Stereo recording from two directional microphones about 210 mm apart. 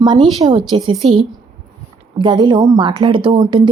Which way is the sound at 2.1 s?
20° right (ahead or behind).